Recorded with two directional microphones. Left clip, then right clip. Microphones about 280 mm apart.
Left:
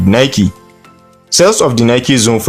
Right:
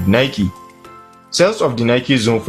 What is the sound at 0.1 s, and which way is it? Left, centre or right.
Speech, left.